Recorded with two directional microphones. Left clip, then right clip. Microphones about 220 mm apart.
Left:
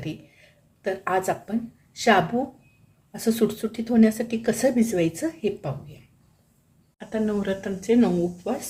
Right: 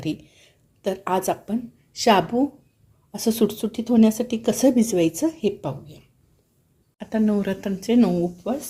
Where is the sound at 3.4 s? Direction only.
30° right (ahead or behind).